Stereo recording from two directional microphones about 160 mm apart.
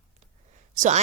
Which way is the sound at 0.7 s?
50° right (ahead or behind).